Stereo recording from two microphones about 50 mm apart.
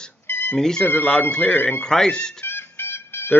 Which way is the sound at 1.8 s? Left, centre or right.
Centre.